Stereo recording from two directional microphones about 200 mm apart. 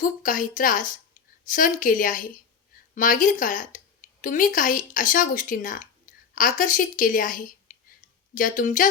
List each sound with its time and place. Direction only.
0.0 s a woman's voice: 40° left (ahead or behind)